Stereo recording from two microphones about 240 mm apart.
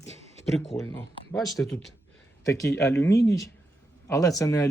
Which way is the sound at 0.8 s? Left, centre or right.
Centre.